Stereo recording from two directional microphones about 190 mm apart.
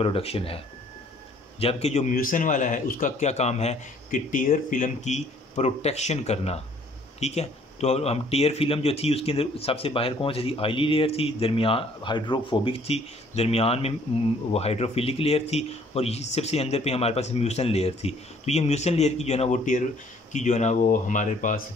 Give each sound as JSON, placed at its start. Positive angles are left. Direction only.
{"t": 0.0, "sound": "speech", "side_deg": 30}
{"t": 1.6, "sound": "speech", "side_deg": 30}